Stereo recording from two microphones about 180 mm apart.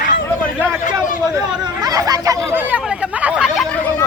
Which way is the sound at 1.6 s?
20° right (ahead or behind).